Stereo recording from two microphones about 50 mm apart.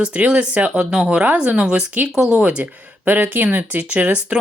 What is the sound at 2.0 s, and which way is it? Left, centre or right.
Speech, centre.